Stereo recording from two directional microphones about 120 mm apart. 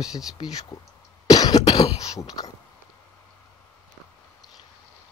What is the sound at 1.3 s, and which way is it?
Cough, 30° left (ahead or behind).